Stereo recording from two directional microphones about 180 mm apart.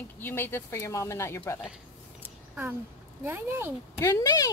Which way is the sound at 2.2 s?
10° right (ahead or behind).